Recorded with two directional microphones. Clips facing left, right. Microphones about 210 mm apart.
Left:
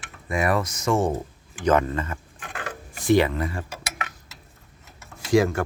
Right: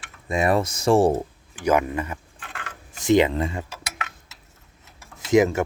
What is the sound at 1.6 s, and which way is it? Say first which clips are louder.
Speech: even; 10° right (ahead or behind).